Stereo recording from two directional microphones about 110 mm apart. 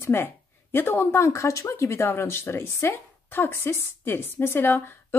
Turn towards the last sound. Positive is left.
turn(degrees=20)  # may be behind; listen again after turning